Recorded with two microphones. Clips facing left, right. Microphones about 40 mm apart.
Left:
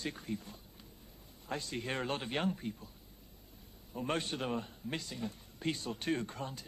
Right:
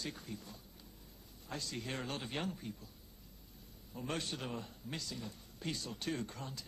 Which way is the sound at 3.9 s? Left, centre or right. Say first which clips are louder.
Left 5 dB; left.